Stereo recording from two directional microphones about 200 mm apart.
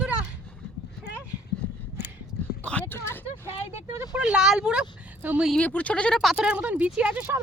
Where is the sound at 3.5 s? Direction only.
30° left (ahead or behind).